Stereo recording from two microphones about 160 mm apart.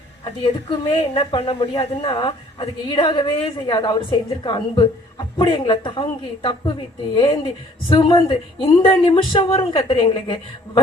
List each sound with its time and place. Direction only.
0.3 s a woman's voice: 35° left (ahead or behind)